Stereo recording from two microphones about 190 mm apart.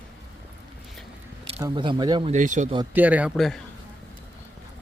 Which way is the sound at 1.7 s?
25° right (ahead or behind).